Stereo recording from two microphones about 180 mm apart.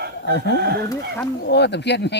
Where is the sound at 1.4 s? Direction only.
70° left (ahead or behind).